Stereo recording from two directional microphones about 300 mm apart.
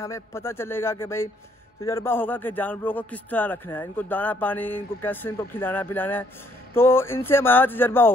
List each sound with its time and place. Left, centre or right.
0.0 s a man's voice: centre